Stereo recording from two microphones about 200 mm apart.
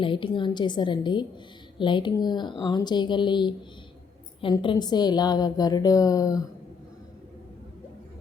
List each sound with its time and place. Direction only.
0.0 s a woman's voice: 25° left (ahead or behind)